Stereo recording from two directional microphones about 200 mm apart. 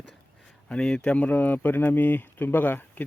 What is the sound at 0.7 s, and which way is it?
Speech, 5° left (ahead or behind).